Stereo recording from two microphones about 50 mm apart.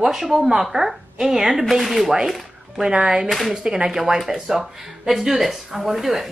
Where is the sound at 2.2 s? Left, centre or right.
Centre.